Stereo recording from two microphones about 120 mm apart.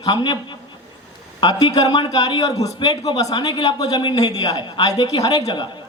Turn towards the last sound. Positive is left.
turn(degrees=35)  # may be behind; listen again after turning